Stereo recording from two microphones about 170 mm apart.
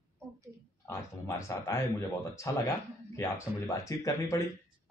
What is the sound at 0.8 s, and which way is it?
A man's voice, 15° left (ahead or behind).